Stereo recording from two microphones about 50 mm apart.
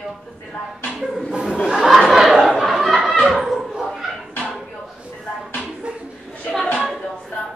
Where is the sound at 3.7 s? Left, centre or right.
Centre.